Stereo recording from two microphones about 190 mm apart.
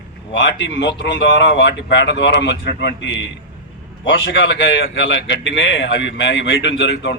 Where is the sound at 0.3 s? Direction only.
70° left (ahead or behind).